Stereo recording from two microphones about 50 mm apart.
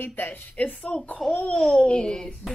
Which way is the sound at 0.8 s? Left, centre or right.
Left.